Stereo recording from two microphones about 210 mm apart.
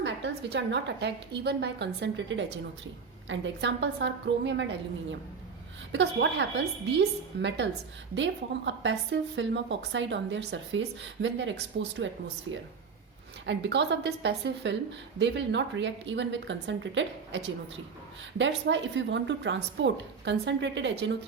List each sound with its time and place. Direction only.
0.0 s a woman's voice: 55° right (ahead or behind)
5.9 s a woman's voice: 60° right (ahead or behind)
13.4 s a woman's voice: 60° right (ahead or behind)